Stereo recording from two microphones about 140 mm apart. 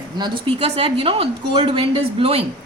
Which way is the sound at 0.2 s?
40° right (ahead or behind).